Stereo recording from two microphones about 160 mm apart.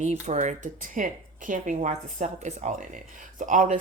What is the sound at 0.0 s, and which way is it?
Speech, 45° right (ahead or behind).